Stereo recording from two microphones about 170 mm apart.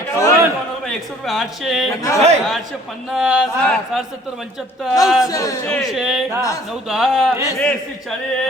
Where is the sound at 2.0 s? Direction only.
20° left (ahead or behind).